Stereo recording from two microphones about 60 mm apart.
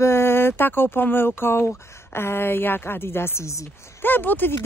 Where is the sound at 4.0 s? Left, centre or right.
Left.